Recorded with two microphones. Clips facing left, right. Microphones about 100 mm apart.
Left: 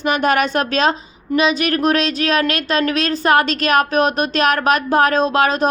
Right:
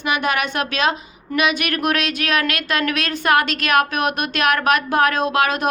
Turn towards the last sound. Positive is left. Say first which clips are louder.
# left 3 dB
turn(degrees=35)  # may be behind; listen again after turning